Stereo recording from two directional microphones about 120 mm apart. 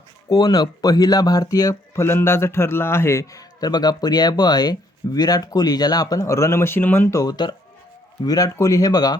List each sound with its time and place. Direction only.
0.3 s speech: 35° left (ahead or behind)